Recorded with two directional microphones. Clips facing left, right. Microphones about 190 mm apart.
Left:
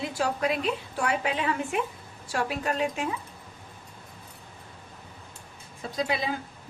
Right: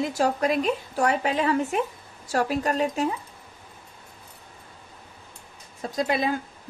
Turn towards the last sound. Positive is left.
turn(degrees=-50)  # may be behind; listen again after turning